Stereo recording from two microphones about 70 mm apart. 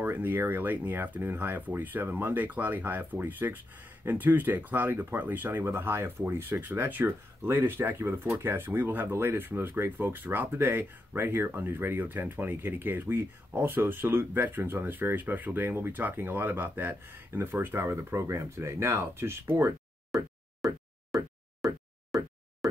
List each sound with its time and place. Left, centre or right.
0.0 s speech: right
20.1 s plop: centre
22.1 s a sound: centre